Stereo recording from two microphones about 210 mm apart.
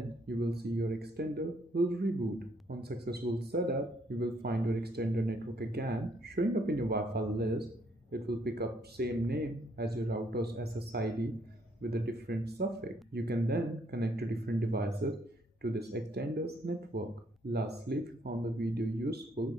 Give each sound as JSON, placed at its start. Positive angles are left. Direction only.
{"t": 0.4, "sound": "speech", "side_deg": -50}